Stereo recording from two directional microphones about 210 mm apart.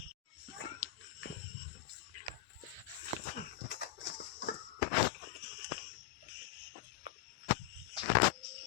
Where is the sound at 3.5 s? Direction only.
50° left (ahead or behind).